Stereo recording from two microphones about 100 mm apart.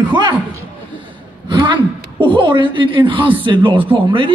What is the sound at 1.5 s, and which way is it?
A woman's voice, 55° right (ahead or behind).